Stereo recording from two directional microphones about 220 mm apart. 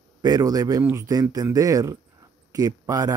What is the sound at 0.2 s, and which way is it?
Speech, 15° right (ahead or behind).